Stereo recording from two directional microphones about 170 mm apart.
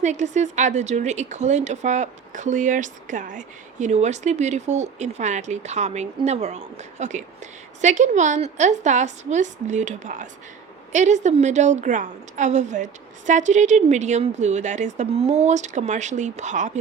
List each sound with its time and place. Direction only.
0.0 s speech: 45° right (ahead or behind)